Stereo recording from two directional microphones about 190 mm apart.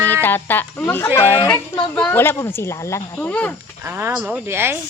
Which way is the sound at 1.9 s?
10° left (ahead or behind).